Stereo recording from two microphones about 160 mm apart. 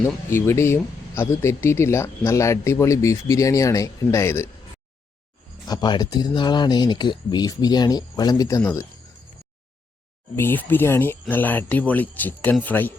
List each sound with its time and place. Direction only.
0.0 s speech: 15° left (ahead or behind)
5.6 s speech: 25° left (ahead or behind)
10.3 s speech: 15° left (ahead or behind)